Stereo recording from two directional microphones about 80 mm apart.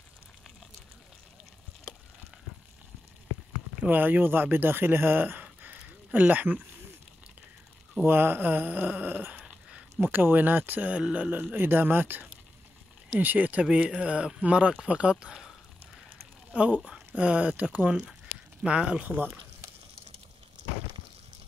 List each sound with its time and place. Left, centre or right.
3.8 s speech: right
8.0 s speech: right
9.9 s speech: right; by 15.5 s centre
16.5 s speech: centre
19.0 s speech: right